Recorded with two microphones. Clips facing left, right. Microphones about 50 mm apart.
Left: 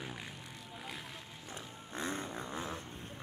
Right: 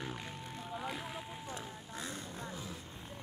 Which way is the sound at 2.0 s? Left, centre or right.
Left.